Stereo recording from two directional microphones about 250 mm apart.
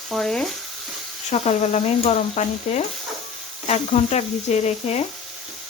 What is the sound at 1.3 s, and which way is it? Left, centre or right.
Speech, left.